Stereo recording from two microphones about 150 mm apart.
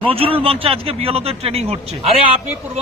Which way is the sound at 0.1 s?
40° right (ahead or behind).